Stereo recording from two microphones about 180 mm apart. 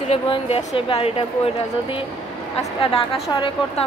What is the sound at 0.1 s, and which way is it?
A woman's voice, 30° left (ahead or behind).